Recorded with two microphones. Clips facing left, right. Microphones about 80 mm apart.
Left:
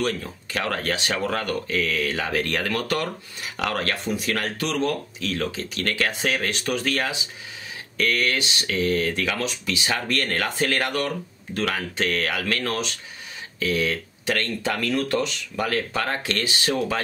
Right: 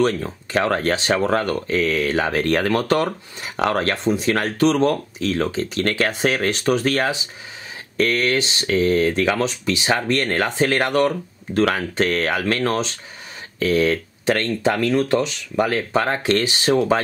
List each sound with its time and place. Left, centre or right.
0.0 s speech: right